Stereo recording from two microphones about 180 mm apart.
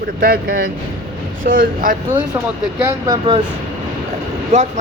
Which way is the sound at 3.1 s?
25° right (ahead or behind).